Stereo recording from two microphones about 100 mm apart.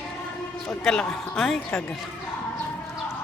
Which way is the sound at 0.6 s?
5° left (ahead or behind).